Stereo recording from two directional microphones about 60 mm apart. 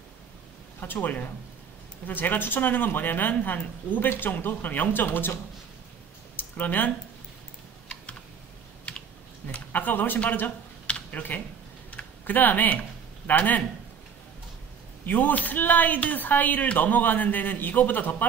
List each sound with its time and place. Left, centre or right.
0.7 s speech: left
6.3 s a sound: left
9.5 s speech: left
10.9 s a sound: left
11.9 s typing: left
13.3 s speech: left
15.0 s speech: left